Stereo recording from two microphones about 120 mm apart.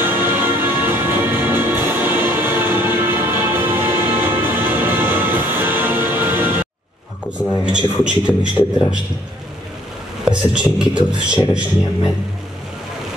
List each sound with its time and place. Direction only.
0.0 s music: 20° right (ahead or behind)
7.6 s a man's voice: 10° right (ahead or behind)
10.2 s a man's voice: 10° right (ahead or behind)